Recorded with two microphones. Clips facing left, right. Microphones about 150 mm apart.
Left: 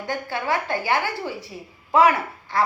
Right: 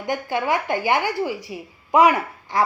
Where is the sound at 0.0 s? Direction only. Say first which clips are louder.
Right 4 dB; 20° right (ahead or behind).